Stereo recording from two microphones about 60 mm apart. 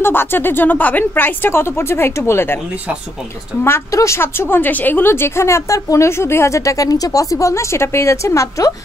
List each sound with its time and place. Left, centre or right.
0.0 s a woman's voice: left
3.9 s a woman's voice: left
4.2 s a woman's voice: left